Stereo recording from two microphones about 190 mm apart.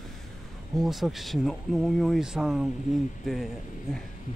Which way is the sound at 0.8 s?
Centre (ahead or behind).